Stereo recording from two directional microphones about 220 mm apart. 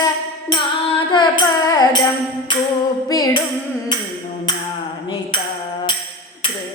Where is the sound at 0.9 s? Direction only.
20° left (ahead or behind).